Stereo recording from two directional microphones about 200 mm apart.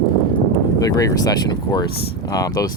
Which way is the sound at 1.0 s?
20° left (ahead or behind).